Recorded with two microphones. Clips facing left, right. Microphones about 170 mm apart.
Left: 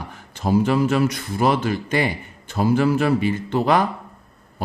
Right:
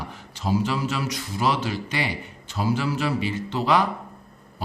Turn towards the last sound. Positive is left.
turn(degrees=50)  # may be behind; listen again after turning